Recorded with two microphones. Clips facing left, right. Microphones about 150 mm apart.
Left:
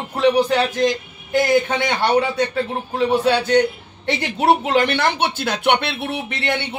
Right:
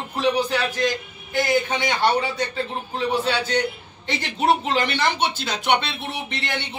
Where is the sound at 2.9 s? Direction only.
60° left (ahead or behind).